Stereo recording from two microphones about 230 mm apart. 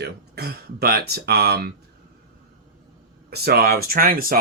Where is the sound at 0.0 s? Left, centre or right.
Right.